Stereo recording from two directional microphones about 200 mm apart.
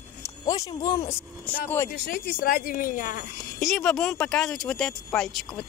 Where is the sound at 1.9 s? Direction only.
45° left (ahead or behind).